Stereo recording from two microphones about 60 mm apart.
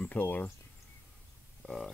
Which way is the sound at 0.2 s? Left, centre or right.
Left.